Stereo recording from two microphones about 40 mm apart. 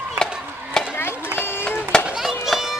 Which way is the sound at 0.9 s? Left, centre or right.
Left.